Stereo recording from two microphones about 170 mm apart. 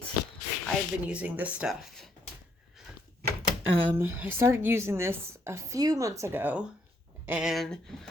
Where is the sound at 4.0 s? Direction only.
10° right (ahead or behind).